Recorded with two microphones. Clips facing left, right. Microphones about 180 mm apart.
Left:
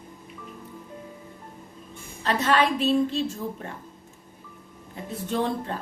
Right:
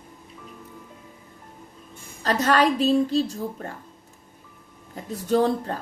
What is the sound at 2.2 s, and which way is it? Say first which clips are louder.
A woman's voice: right 2 dB; 40° right (ahead or behind).